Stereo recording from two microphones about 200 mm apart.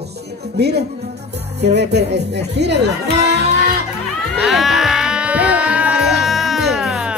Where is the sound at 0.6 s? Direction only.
55° right (ahead or behind).